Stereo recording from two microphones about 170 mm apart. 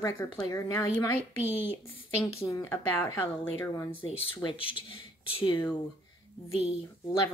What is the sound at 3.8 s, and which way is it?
Speech, 35° left (ahead or behind).